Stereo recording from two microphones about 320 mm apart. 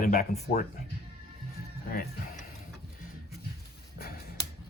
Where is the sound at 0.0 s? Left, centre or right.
Left.